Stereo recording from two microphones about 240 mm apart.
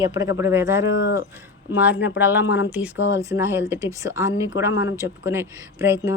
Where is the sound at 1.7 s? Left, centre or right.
Centre.